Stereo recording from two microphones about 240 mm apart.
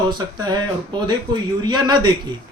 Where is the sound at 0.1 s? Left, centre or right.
Centre.